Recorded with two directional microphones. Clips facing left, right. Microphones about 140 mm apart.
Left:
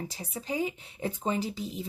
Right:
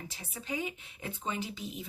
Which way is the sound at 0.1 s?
35° left (ahead or behind).